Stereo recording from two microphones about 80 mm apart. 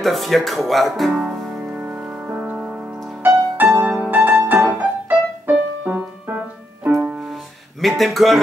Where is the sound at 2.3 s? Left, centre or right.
Right.